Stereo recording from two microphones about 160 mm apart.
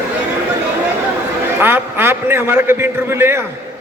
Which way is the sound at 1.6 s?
15° right (ahead or behind).